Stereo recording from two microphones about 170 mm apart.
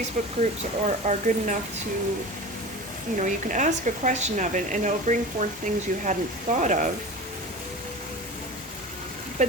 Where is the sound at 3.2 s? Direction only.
45° right (ahead or behind).